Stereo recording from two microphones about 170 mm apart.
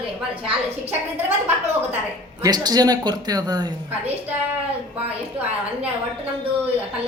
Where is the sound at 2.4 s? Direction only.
25° right (ahead or behind).